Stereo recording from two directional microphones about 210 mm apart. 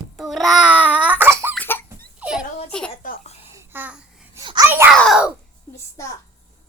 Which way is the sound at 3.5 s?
10° right (ahead or behind).